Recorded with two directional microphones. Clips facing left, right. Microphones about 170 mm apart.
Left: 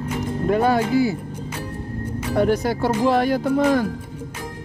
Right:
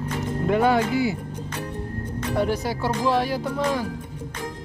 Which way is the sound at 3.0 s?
55° left (ahead or behind).